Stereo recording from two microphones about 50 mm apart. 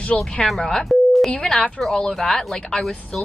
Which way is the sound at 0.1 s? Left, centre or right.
Centre.